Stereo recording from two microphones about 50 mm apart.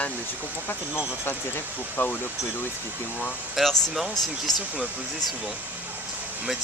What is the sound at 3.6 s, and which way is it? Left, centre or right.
Speech, centre.